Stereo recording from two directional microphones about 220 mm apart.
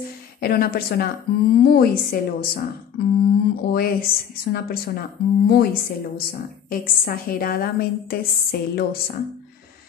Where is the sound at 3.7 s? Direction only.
40° left (ahead or behind).